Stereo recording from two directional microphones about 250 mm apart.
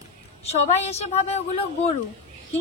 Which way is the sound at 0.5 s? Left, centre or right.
Left.